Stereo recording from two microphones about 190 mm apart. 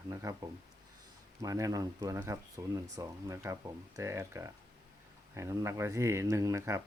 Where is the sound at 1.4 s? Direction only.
15° right (ahead or behind).